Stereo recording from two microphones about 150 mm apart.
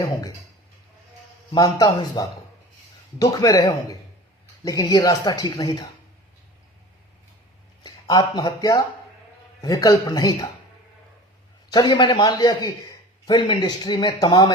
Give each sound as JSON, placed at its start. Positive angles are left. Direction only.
{"t": 1.5, "sound": "a man's voice", "side_deg": 25}
{"t": 7.9, "sound": "a man's voice", "side_deg": 25}
{"t": 11.7, "sound": "a man's voice", "side_deg": 30}